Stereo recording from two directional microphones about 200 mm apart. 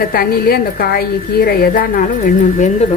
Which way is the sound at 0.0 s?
50° left (ahead or behind).